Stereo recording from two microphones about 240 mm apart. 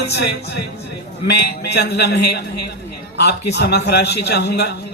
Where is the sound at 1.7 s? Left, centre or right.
Left.